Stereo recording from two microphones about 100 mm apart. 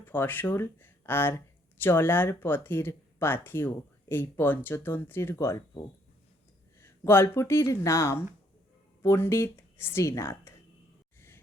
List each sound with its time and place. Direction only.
0.0 s speech: 20° left (ahead or behind)
6.7 s speech: 25° left (ahead or behind)